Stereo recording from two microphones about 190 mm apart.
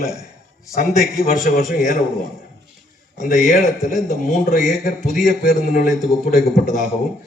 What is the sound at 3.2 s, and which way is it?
A man's voice, 45° left (ahead or behind).